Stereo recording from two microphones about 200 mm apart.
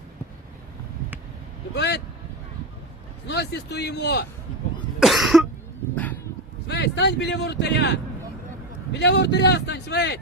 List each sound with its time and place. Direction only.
1.7 s speech: 60° left (ahead or behind)
3.2 s speech: 55° left (ahead or behind)
4.9 s cough: centre (ahead or behind)
6.7 s speech: 60° left (ahead or behind)